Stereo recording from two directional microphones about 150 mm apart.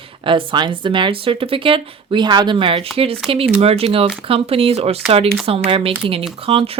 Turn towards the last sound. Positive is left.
turn(degrees=-40)  # may be behind; listen again after turning